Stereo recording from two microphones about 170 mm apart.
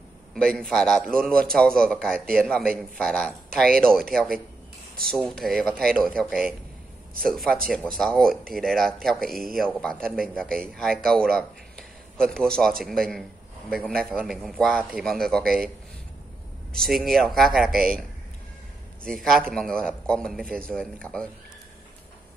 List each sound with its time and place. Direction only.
0.3 s a man's voice: 5° left (ahead or behind)
16.7 s a man's voice: centre (ahead or behind)
17.6 s speech: 60° right (ahead or behind)
19.0 s a man's voice: centre (ahead or behind)